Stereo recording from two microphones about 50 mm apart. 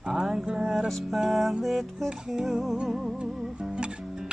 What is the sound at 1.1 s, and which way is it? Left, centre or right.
Music, centre.